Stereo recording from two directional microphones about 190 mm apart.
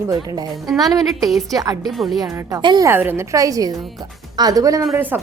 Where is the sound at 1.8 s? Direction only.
Centre (ahead or behind).